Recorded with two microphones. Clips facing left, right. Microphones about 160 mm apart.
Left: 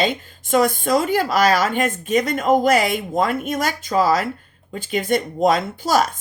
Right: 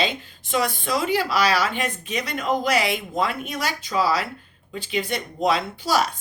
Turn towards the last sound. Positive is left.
turn(degrees=45)  # may be behind; listen again after turning